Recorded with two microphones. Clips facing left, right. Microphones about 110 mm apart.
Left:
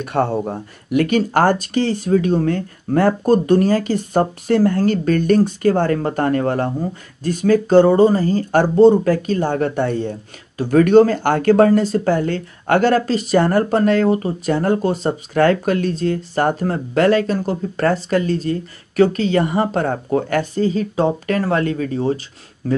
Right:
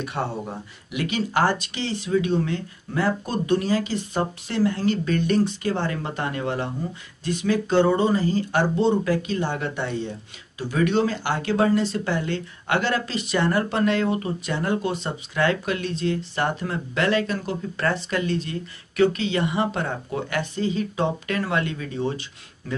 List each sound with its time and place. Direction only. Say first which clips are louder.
0.0 s speech: left 9 dB; 50° left (ahead or behind)